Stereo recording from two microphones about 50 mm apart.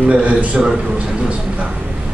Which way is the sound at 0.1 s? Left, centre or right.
Right.